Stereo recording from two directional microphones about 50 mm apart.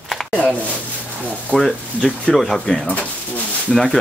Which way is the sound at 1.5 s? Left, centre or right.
Right.